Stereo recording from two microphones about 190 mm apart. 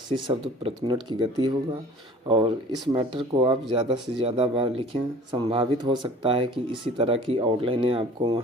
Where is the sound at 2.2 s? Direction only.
30° right (ahead or behind).